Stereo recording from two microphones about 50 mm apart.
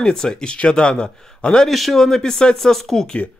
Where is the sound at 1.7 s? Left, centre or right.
Centre.